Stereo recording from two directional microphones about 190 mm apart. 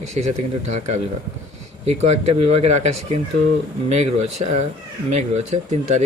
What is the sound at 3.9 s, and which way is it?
Speech, 35° right (ahead or behind).